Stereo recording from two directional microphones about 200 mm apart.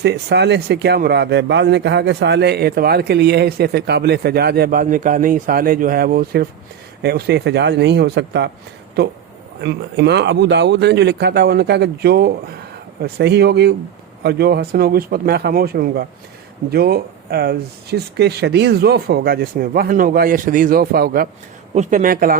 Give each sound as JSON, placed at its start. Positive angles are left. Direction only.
{"t": 0.0, "sound": "speech", "side_deg": -55}
{"t": 9.6, "sound": "speech", "side_deg": -60}